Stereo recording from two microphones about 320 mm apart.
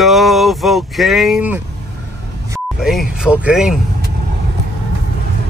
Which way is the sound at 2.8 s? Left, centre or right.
Centre.